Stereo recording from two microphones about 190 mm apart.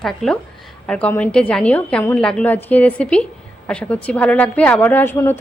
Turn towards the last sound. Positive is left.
turn(degrees=10)  # may be behind; listen again after turning